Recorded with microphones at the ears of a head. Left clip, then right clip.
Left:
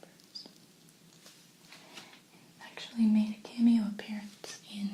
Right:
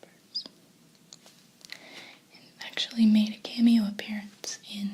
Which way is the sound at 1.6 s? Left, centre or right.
Right.